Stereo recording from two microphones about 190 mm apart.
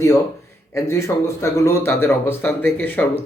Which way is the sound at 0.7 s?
15° left (ahead or behind).